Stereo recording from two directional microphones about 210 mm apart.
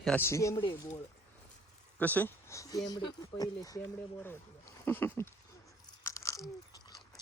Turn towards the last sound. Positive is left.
turn(degrees=15)  # may be behind; listen again after turning